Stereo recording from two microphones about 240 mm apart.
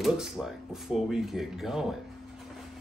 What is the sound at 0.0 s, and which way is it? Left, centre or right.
Speech, centre.